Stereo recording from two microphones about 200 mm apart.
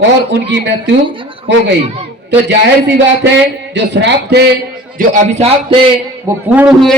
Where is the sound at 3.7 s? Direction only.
60° right (ahead or behind).